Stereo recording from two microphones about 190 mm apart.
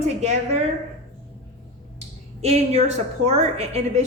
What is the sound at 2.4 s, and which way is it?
A woman's voice, 35° right (ahead or behind).